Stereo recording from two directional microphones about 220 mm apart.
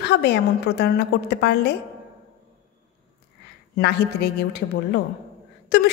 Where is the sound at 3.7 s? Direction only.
50° left (ahead or behind).